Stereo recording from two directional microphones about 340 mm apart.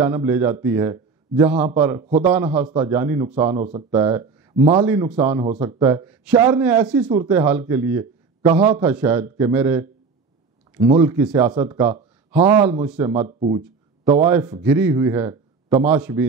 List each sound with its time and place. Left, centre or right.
0.0 s a man's voice: centre
13.1 s a man's voice: centre